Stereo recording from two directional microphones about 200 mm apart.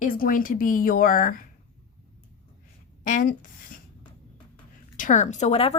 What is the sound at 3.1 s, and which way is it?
Speech, 40° left (ahead or behind).